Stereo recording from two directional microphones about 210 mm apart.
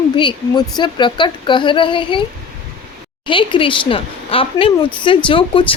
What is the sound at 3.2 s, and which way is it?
Speech, 25° left (ahead or behind).